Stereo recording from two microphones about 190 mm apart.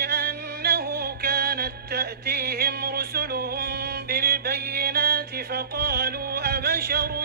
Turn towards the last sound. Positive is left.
turn(degrees=-55)  # may be behind; listen again after turning